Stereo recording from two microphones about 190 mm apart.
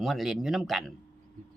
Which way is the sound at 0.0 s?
Centre (ahead or behind).